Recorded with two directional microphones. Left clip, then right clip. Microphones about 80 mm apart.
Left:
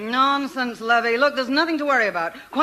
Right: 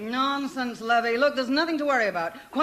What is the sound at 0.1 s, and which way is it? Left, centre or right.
A man's voice, left.